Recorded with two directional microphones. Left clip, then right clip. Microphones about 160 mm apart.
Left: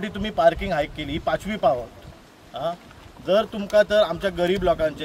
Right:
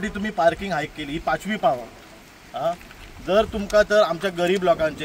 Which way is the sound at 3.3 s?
45° left (ahead or behind).